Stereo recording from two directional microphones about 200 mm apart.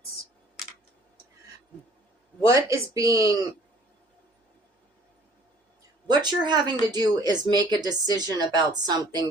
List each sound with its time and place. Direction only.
2.5 s speech: 15° right (ahead or behind)
6.1 s a woman's voice: 20° right (ahead or behind)